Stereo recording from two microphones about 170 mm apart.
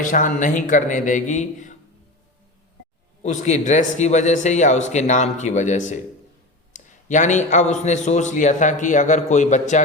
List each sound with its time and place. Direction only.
0.0 s a man's voice: 50° left (ahead or behind)
3.2 s a man's voice: 45° left (ahead or behind)